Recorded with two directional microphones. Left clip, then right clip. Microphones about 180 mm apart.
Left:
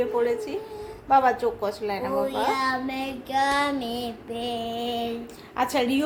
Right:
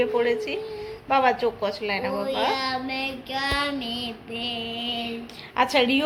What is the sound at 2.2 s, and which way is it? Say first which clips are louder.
Child singing: right 1 dB; 40° left (ahead or behind).